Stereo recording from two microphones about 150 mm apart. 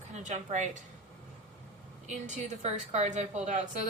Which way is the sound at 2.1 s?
50° right (ahead or behind).